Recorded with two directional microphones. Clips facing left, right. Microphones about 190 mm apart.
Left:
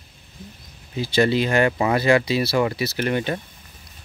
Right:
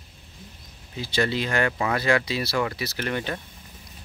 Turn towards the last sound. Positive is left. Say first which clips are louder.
# left 5 dB
turn(degrees=10)  # may be behind; listen again after turning